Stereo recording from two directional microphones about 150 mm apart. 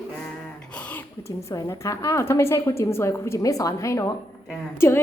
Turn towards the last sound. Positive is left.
turn(degrees=15)  # may be behind; listen again after turning